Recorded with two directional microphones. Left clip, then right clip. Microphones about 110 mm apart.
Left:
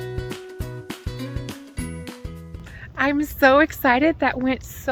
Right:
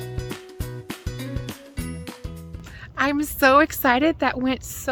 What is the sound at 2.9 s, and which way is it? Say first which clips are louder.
A woman's voice: left 1 dB; 25° right (ahead or behind).